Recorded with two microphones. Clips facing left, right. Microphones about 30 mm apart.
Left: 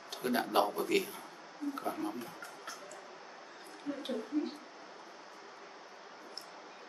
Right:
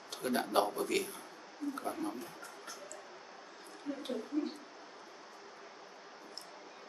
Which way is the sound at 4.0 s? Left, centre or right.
Centre.